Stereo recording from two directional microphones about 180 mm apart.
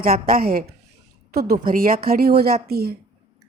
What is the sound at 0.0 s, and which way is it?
A woman's voice, 55° right (ahead or behind).